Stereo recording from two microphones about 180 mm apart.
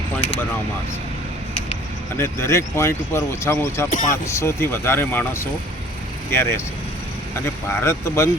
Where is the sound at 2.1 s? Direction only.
15° left (ahead or behind).